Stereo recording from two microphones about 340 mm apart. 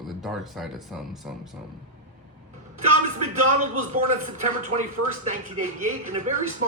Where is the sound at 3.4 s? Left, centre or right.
Right.